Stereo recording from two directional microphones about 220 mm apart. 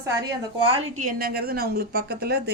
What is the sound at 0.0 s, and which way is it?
A woman's voice, 15° right (ahead or behind).